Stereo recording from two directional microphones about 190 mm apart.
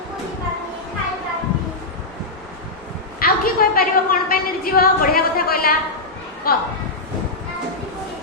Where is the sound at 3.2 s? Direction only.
50° left (ahead or behind).